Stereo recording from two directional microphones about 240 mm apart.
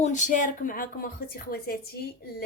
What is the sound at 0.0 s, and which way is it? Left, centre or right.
A woman's voice, left.